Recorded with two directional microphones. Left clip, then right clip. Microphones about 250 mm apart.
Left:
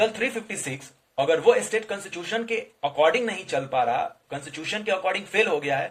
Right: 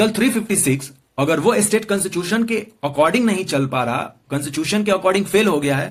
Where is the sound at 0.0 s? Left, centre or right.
Centre.